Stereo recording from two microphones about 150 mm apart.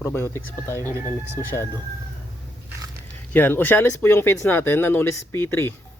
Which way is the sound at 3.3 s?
15° left (ahead or behind).